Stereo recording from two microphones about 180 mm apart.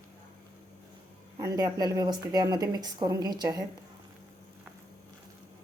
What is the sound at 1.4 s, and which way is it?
A woman's voice, 20° right (ahead or behind).